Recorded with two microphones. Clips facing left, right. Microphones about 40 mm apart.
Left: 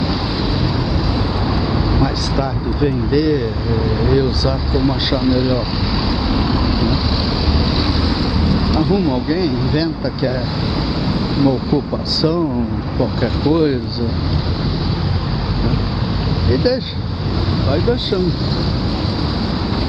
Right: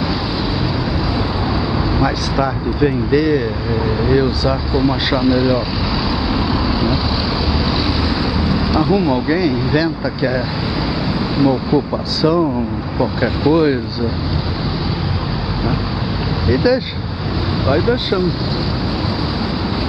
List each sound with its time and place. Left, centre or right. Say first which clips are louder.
2.0 s speech: right 2 dB; centre
4.0 s speech: right 1 dB; centre
8.5 s speech: right 1 dB; centre
16.4 s speech: right 2 dB; right